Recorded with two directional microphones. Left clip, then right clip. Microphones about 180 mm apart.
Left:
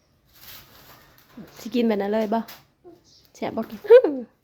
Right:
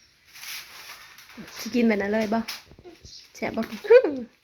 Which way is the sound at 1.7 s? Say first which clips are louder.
Left 1 dB; 40° left (ahead or behind).